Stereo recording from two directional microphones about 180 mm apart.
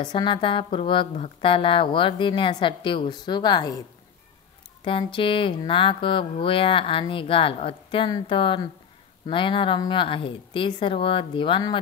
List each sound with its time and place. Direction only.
0.0 s a woman's voice: 25° left (ahead or behind)
4.8 s a woman's voice: 30° left (ahead or behind)